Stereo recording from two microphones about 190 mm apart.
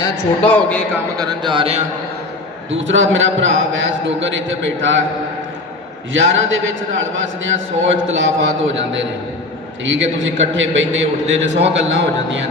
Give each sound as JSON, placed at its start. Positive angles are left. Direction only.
{"t": 0.4, "sound": "a man's voice", "side_deg": 5}
{"t": 1.1, "sound": "speech", "side_deg": -20}
{"t": 2.7, "sound": "a man's voice", "side_deg": -90}
{"t": 6.1, "sound": "a man's voice", "side_deg": -80}
{"t": 9.8, "sound": "a man's voice", "side_deg": -80}